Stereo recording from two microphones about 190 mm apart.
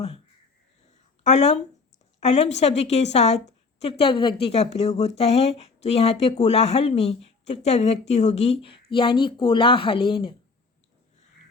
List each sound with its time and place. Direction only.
1.2 s a woman's voice: 35° left (ahead or behind)